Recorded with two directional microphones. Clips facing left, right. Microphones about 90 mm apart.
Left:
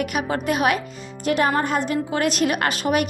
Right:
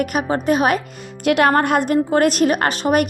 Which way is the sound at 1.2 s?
70° right (ahead or behind).